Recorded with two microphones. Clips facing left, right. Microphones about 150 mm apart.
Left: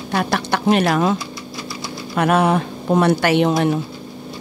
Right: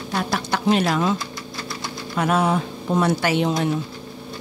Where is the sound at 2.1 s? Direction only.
65° left (ahead or behind).